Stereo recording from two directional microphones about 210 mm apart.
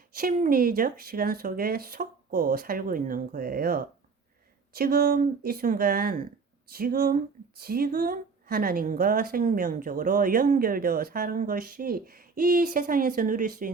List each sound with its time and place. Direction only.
0.2 s a woman's voice: 45° right (ahead or behind)